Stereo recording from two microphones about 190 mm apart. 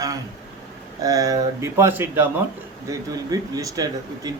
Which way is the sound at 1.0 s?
20° right (ahead or behind).